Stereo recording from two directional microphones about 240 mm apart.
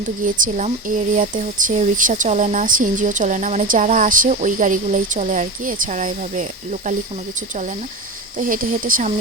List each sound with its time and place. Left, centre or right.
0.0 s speech: right